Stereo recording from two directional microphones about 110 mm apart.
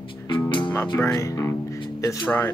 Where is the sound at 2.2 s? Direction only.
15° left (ahead or behind).